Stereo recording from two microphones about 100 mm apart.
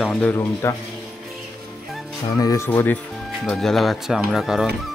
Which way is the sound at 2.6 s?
20° left (ahead or behind).